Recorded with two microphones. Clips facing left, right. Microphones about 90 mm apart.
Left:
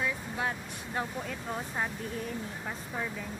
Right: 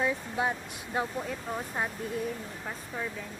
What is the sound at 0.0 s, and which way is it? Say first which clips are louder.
Vehicle: right 4 dB; 20° right (ahead or behind).